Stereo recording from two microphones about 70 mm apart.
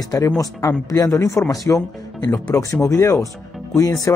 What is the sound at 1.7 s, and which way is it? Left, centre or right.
Speech, left.